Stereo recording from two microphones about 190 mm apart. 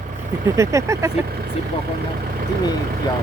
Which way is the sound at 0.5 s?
15° right (ahead or behind).